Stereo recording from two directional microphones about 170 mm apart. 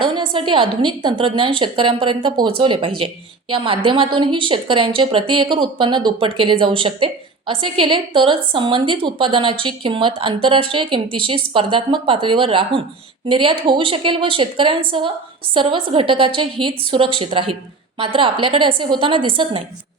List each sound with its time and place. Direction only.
0.0 s a woman's voice: 30° right (ahead or behind)